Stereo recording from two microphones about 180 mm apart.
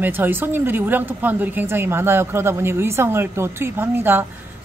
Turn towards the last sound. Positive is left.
turn(degrees=-10)  # may be behind; listen again after turning